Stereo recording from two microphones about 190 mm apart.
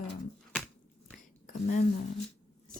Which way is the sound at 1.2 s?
40° left (ahead or behind).